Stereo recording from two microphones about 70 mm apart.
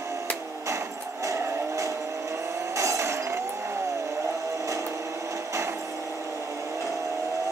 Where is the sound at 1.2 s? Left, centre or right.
Right.